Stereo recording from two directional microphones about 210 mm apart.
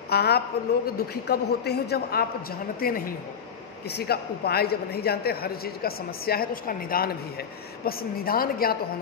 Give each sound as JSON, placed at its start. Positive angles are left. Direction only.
{"t": 0.1, "sound": "a woman's voice", "side_deg": 50}